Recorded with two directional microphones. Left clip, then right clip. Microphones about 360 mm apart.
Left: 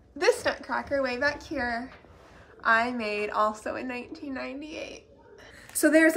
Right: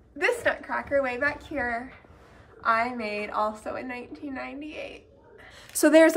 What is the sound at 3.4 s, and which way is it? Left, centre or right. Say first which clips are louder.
Speech: left 1 dB; centre.